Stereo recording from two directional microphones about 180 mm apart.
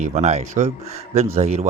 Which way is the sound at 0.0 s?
40° right (ahead or behind).